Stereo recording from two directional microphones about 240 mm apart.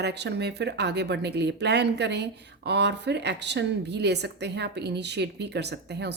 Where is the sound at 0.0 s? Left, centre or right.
Right.